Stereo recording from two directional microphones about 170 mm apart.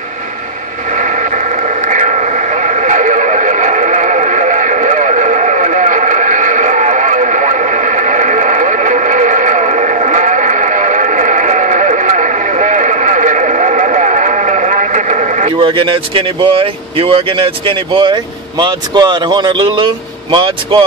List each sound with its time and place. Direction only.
0.9 s radio: 45° right (ahead or behind)
15.5 s speech: 30° right (ahead or behind)